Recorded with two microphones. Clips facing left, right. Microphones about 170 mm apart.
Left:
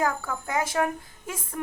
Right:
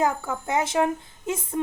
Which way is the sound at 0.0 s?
25° right (ahead or behind).